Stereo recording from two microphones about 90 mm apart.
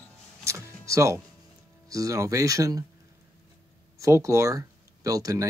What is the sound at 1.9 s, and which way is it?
Speech, 40° right (ahead or behind).